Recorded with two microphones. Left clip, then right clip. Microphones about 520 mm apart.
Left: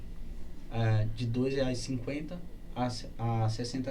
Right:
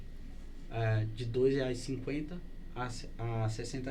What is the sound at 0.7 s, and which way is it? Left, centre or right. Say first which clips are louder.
Speech: left 1 dB; right.